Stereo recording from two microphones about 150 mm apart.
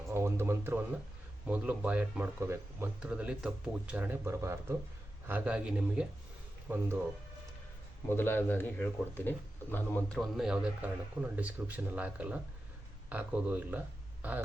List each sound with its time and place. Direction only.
0.1 s speech: 15° right (ahead or behind)
8.1 s speech: 15° left (ahead or behind)
10.2 s a man's voice: 5° right (ahead or behind)